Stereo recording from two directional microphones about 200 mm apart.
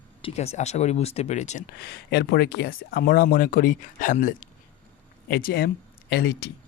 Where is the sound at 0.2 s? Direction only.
30° left (ahead or behind).